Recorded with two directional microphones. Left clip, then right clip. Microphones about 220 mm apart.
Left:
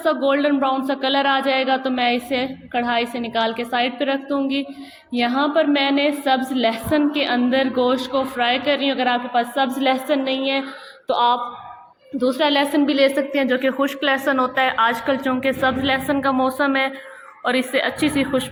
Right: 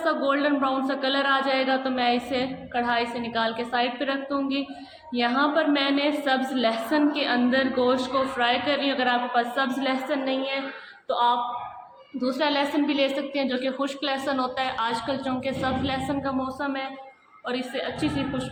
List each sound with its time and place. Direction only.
0.0 s a woman's voice: 30° left (ahead or behind)